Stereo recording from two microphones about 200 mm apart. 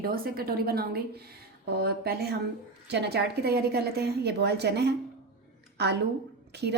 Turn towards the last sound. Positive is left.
turn(degrees=-55)  # may be behind; listen again after turning